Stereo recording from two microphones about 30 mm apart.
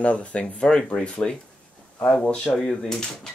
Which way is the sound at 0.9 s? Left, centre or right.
Left.